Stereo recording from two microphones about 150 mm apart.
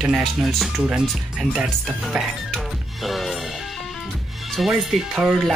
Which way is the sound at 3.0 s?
Centre (ahead or behind).